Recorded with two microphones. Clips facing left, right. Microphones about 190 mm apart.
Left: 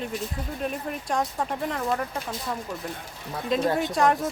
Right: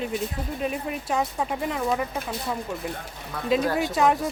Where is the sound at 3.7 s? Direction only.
5° right (ahead or behind).